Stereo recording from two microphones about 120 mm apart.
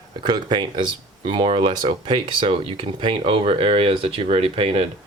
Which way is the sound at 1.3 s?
50° right (ahead or behind).